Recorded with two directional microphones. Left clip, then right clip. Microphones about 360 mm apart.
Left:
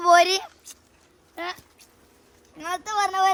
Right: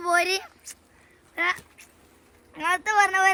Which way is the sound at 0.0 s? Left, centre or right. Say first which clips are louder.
Left 6 dB; left.